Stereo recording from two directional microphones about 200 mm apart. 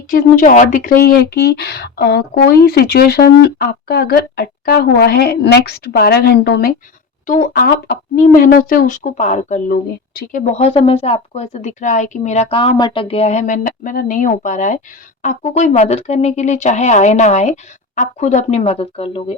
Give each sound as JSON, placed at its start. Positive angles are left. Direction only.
{"t": 0.1, "sound": "speech", "side_deg": 45}